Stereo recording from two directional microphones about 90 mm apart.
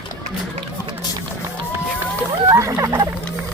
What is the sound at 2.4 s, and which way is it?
Music, 35° right (ahead or behind).